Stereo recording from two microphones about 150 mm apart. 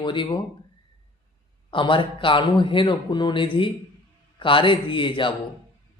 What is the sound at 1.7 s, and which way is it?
A man's voice, 35° left (ahead or behind).